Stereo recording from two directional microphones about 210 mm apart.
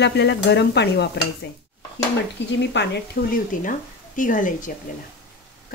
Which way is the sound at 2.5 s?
55° left (ahead or behind).